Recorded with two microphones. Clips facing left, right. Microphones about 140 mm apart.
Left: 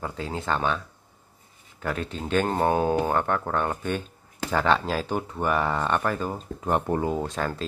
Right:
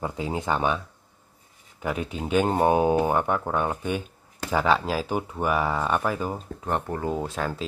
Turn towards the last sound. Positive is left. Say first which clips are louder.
# even
turn(degrees=-5)  # may be behind; listen again after turning